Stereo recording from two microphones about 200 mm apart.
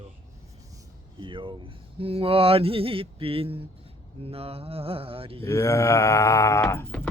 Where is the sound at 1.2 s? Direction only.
25° right (ahead or behind).